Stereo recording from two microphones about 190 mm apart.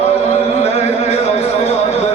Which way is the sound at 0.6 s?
35° left (ahead or behind).